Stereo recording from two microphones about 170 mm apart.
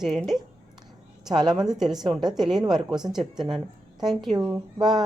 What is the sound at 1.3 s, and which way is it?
Speech, 25° right (ahead or behind).